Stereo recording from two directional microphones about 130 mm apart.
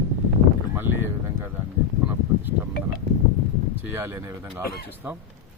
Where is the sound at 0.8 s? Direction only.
20° right (ahead or behind).